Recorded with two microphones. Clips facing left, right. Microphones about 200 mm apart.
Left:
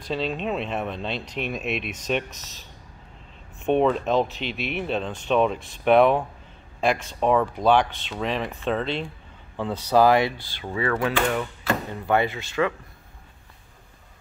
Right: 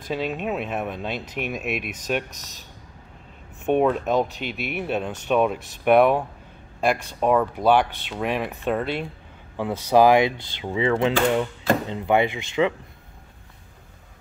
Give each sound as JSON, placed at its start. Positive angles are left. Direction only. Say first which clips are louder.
{"t": 0.1, "sound": "speech", "louder": "even", "side_deg": -10}
{"t": 3.6, "sound": "speech", "louder": "even", "side_deg": -10}